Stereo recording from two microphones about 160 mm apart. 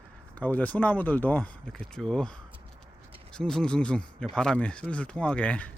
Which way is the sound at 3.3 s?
5° left (ahead or behind).